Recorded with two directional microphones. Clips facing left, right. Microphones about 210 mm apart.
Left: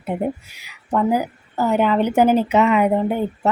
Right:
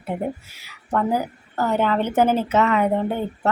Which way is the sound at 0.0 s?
15° left (ahead or behind).